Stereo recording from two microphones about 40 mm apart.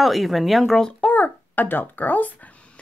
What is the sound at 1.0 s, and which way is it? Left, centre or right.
A child's voice, left.